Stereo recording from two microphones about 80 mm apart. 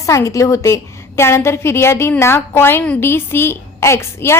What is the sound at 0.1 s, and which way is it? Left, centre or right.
A woman's voice, left.